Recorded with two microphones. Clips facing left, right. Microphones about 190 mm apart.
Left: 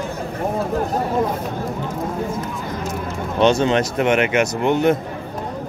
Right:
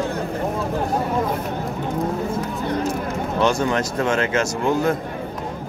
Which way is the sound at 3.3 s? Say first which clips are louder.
Left 4 dB; 20° left (ahead or behind).